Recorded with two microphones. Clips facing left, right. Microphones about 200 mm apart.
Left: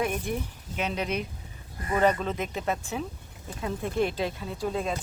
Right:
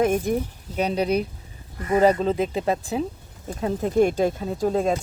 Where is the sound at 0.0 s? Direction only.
45° right (ahead or behind).